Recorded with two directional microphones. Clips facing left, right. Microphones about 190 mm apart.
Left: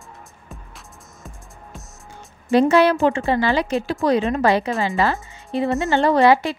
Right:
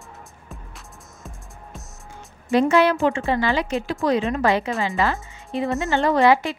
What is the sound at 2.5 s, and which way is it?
Speech, 35° left (ahead or behind).